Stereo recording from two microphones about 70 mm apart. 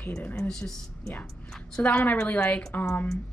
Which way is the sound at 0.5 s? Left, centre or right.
Centre.